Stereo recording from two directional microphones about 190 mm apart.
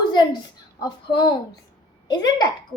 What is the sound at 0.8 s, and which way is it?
Speech, 25° left (ahead or behind).